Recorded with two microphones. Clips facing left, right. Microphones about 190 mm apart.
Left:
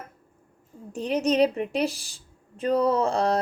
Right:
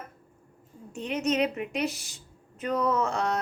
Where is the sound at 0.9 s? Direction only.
35° left (ahead or behind).